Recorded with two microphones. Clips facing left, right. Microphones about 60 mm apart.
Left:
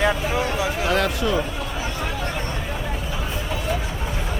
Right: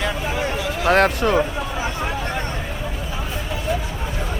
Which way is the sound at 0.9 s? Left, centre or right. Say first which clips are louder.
Right 8 dB; right.